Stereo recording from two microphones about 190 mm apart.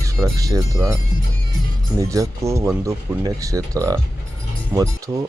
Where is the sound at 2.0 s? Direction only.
15° right (ahead or behind).